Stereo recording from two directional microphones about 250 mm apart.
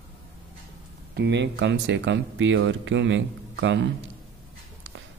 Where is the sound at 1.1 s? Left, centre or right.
Right.